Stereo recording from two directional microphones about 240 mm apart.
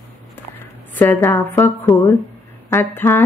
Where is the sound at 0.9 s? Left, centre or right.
Centre.